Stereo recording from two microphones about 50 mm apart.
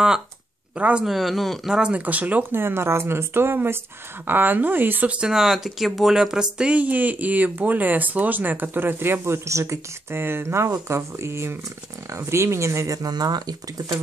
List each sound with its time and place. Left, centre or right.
0.7 s speech: right
1.0 s speech: centre
1.7 s speech: centre
2.0 s speech: right
2.5 s speech: right
4.3 s speech: right
5.1 s speech: centre
6.7 s speech: right
10.1 s speech: right
12.1 s speech: right